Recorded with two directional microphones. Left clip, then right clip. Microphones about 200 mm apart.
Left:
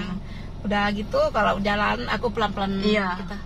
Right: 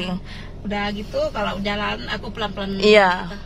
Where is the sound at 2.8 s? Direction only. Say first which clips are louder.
Right 12 dB; 55° right (ahead or behind).